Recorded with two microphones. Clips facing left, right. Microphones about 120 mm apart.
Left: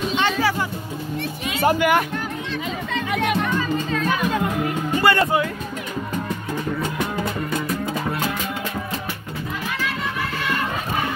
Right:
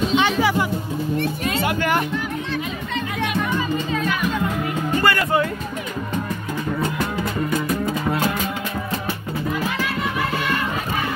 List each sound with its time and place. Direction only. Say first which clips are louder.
0.2 s music: right 2 dB; 15° right (ahead or behind)
1.8 s speech: left 2 dB; 5° left (ahead or behind)
5.0 s speech: left 4 dB; 25° left (ahead or behind)